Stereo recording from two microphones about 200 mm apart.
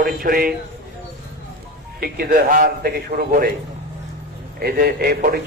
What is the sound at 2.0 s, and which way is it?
A man's voice, 50° right (ahead or behind).